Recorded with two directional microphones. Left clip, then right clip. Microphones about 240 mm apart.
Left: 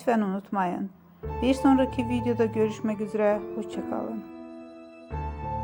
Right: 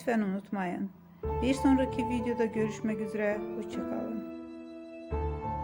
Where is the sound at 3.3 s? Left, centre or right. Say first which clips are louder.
Left 5 dB; centre.